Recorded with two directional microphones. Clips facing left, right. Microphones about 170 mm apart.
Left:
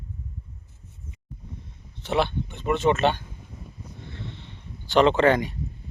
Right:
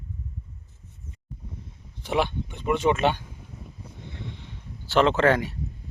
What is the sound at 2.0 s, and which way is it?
Speech, 10° right (ahead or behind).